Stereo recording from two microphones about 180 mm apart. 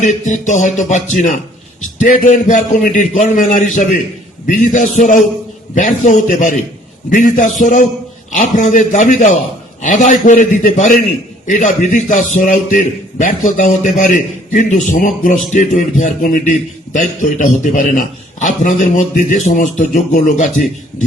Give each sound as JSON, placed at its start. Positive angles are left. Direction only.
{"t": 0.0, "sound": "a man's voice", "side_deg": 45}